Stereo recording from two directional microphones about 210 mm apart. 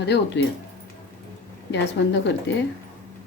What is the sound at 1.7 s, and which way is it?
Speech, 55° left (ahead or behind).